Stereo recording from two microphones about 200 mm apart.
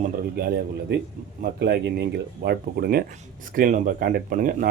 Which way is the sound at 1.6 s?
55° right (ahead or behind).